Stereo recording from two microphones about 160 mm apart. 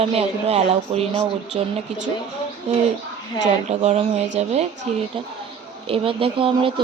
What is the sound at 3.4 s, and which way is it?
Speech, 45° right (ahead or behind).